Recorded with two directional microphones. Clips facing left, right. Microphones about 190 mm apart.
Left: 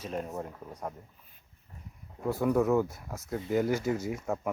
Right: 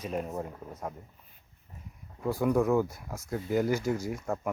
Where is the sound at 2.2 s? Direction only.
Centre (ahead or behind).